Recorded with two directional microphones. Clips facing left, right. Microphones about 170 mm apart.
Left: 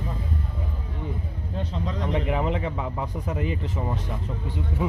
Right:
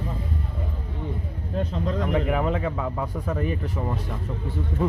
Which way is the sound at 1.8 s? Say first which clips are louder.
Right 2 dB; 45° right (ahead or behind).